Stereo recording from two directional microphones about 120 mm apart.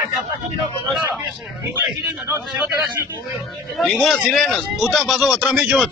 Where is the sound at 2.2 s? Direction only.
20° right (ahead or behind).